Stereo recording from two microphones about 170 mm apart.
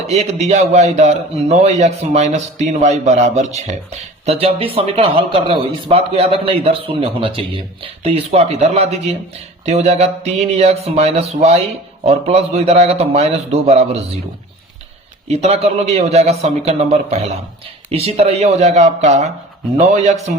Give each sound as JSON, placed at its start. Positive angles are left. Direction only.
{"t": 0.1, "sound": "speech", "side_deg": -40}
{"t": 15.3, "sound": "speech", "side_deg": -40}